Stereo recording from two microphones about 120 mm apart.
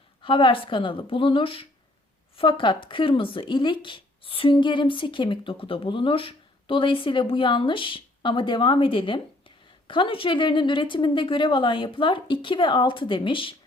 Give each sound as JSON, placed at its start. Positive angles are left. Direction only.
{"t": 0.2, "sound": "speech", "side_deg": 45}